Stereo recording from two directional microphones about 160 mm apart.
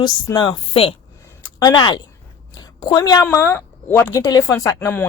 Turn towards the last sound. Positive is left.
turn(degrees=15)  # may be behind; listen again after turning